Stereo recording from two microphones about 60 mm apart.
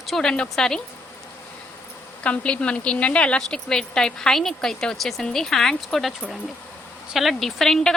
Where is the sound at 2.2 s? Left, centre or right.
Centre.